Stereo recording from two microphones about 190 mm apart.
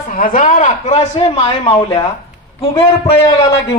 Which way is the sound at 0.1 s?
45° left (ahead or behind).